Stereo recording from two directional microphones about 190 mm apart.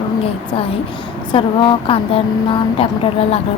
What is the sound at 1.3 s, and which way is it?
A woman's voice, 25° left (ahead or behind).